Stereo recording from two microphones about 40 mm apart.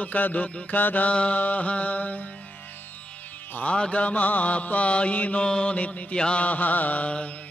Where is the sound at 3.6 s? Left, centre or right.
Left.